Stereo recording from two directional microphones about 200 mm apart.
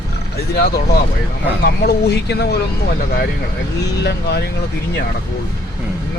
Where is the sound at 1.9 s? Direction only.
55° left (ahead or behind).